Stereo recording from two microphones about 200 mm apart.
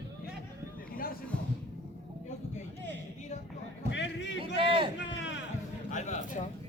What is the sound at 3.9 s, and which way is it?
Run, 60° left (ahead or behind).